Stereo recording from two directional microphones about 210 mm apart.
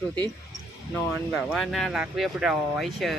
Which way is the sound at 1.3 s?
5° right (ahead or behind).